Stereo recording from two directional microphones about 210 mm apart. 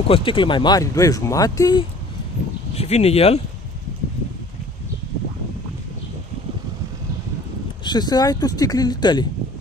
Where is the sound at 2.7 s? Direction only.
30° left (ahead or behind).